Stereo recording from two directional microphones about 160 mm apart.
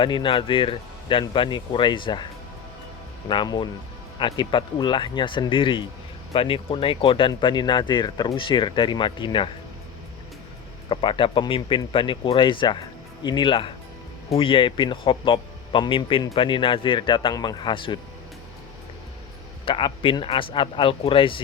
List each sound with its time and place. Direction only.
0.0 s a man's voice: 30° left (ahead or behind)
10.8 s a man's voice: 30° left (ahead or behind)
19.6 s a man's voice: 35° left (ahead or behind)